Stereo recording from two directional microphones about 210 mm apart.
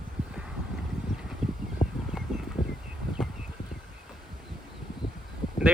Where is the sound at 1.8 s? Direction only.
35° left (ahead or behind).